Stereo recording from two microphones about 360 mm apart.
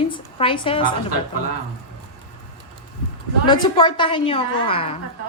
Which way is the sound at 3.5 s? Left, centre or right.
Centre.